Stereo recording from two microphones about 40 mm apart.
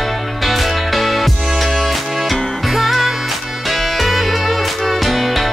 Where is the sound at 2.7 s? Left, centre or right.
Centre.